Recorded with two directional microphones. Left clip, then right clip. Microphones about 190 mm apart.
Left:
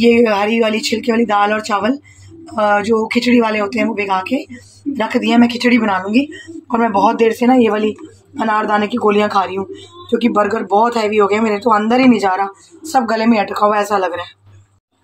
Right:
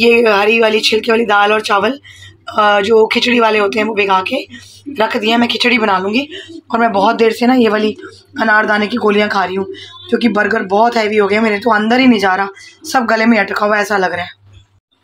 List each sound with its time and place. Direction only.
0.0 s speech: centre (ahead or behind)